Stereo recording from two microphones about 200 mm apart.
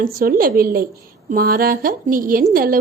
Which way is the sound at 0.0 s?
45° right (ahead or behind).